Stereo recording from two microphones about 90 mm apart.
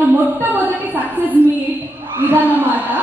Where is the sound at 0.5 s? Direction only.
20° right (ahead or behind).